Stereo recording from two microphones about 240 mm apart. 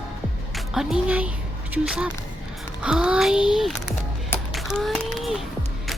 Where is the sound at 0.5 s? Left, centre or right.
Centre.